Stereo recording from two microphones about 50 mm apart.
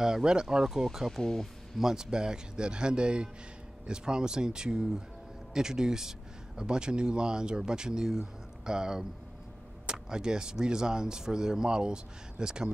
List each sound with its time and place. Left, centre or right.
0.0 s speech: centre
1.2 s speech: centre
1.8 s speech: centre